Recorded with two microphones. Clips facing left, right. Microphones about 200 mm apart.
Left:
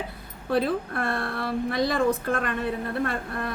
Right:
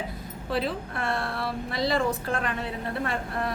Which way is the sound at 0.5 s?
55° left (ahead or behind).